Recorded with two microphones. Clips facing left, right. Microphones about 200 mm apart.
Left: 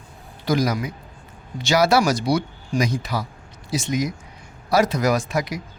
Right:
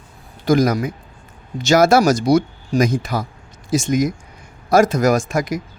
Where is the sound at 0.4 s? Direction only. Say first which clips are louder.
Right 6 dB; 50° right (ahead or behind).